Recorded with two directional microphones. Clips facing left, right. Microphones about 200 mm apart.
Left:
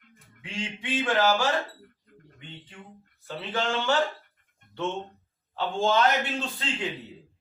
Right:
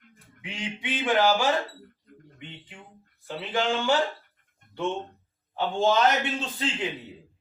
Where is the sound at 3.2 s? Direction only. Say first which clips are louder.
Right 2 dB; 15° right (ahead or behind).